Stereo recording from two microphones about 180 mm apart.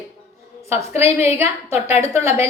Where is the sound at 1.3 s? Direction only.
15° right (ahead or behind).